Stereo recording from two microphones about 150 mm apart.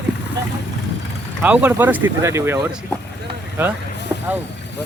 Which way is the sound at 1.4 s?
10° right (ahead or behind).